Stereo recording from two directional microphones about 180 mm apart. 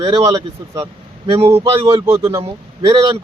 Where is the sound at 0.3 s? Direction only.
15° right (ahead or behind).